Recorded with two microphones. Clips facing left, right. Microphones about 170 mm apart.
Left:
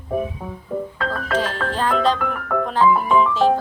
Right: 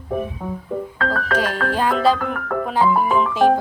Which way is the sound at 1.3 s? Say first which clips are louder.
Even; 10° right (ahead or behind).